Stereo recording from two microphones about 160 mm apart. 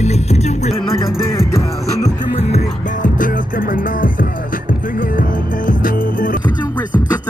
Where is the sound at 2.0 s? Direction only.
40° left (ahead or behind).